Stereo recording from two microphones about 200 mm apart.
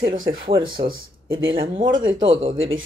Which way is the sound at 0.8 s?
50° right (ahead or behind).